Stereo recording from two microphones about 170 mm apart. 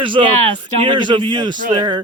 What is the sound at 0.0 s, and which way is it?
Speech, 30° right (ahead or behind).